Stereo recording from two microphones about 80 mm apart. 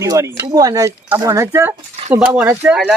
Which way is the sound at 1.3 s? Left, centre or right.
Right.